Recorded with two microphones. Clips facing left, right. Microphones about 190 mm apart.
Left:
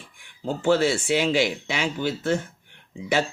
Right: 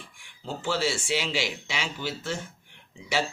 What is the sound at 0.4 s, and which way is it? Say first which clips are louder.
Speech: left 8 dB; 55° left (ahead or behind).